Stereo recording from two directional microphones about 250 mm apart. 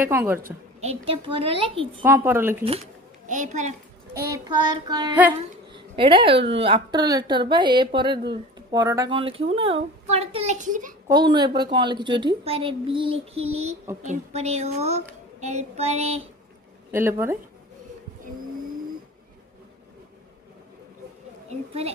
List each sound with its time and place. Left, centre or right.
0.0 s speech: centre
0.4 s a child's voice: right
2.0 s speech: centre
3.3 s a child's voice: right
4.3 s speech: centre
5.7 s a sound: centre
6.5 s a child's voice: right
11.1 s a child's voice: centre
16.9 s speech: centre
21.5 s a child's voice: right